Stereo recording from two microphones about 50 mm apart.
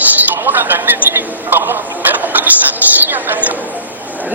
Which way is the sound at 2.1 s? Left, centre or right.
Right.